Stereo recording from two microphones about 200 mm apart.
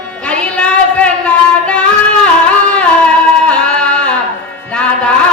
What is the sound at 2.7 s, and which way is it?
Music, 5° left (ahead or behind).